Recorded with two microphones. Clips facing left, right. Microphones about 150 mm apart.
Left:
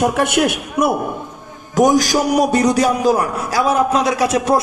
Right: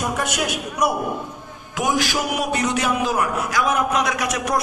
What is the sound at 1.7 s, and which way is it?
A man's voice, 40° left (ahead or behind).